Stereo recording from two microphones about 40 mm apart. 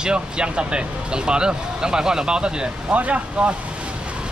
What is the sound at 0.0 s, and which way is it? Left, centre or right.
Speech, right.